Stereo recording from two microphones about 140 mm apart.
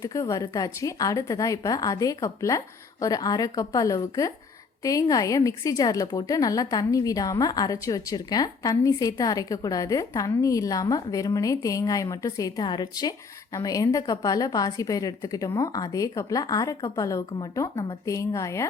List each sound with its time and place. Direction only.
0.0 s a woman's voice: 25° left (ahead or behind)